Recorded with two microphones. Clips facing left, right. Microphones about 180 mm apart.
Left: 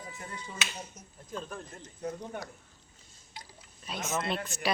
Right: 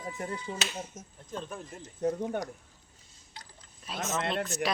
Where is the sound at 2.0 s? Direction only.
45° right (ahead or behind).